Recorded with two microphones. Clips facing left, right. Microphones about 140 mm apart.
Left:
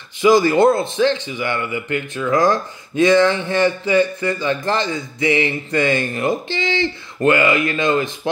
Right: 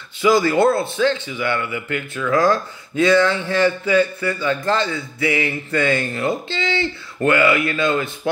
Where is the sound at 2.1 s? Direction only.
20° left (ahead or behind).